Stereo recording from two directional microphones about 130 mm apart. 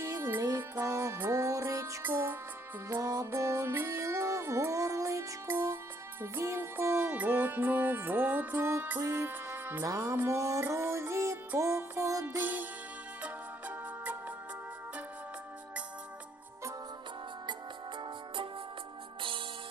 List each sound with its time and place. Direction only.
0.0 s music: 20° right (ahead or behind)